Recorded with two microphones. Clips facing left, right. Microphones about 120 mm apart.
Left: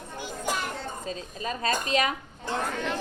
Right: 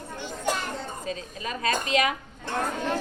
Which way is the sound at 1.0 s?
35° left (ahead or behind).